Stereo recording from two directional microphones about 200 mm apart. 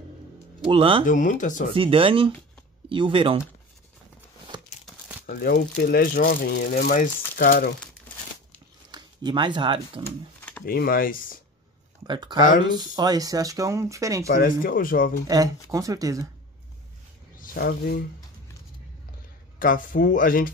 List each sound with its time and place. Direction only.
0.7 s speech: 25° right (ahead or behind)
1.0 s speech: 40° left (ahead or behind)
1.7 s speech: 25° right (ahead or behind)
4.5 s crumpling: 20° right (ahead or behind)
4.8 s crumpling: 5° right (ahead or behind)
5.2 s speech: 50° left (ahead or behind)
8.9 s speech: 20° right (ahead or behind)
10.6 s speech: 50° left (ahead or behind)
12.0 s speech: 20° right (ahead or behind)
14.2 s speech: 45° left (ahead or behind)
15.2 s speech: 20° right (ahead or behind)
17.4 s speech: 50° left (ahead or behind)
19.6 s speech: 45° left (ahead or behind)